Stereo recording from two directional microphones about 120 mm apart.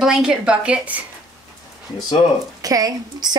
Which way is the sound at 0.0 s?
5° right (ahead or behind).